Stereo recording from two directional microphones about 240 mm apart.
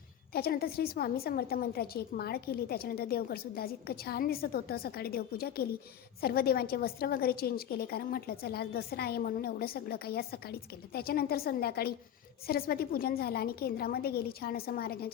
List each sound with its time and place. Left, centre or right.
0.3 s a woman's voice: left